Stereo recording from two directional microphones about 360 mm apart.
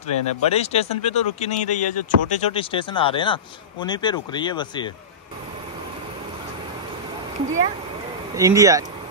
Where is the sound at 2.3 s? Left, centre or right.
Centre.